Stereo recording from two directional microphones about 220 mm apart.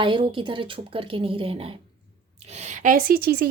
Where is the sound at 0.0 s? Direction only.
20° right (ahead or behind).